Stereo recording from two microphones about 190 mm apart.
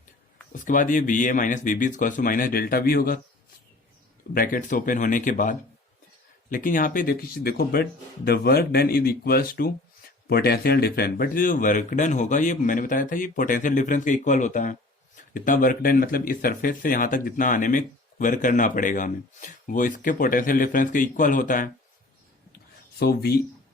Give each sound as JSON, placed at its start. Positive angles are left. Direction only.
{"t": 0.5, "sound": "a man's voice", "side_deg": 45}
{"t": 4.4, "sound": "a man's voice", "side_deg": 45}
{"t": 23.0, "sound": "a man's voice", "side_deg": 55}